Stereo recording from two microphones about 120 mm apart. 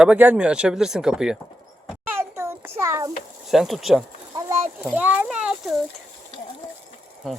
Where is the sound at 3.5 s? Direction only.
Centre (ahead or behind).